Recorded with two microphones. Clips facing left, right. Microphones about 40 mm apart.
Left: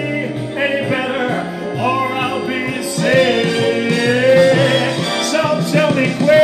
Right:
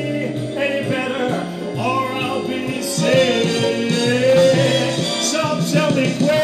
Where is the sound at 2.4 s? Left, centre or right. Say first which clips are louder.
Left 3 dB; left.